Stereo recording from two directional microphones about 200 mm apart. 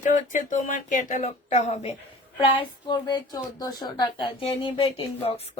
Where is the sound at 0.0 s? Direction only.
40° left (ahead or behind).